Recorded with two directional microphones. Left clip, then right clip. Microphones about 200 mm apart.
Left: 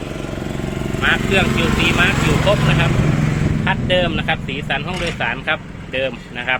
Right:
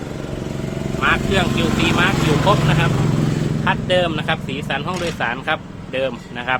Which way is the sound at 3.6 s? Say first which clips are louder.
Even; 10° right (ahead or behind).